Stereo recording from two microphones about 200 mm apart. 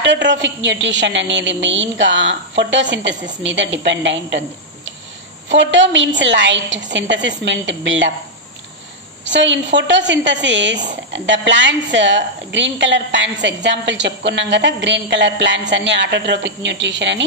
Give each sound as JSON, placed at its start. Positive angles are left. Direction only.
{"t": 0.0, "sound": "a woman's voice", "side_deg": -65}
{"t": 9.2, "sound": "a woman's voice", "side_deg": -65}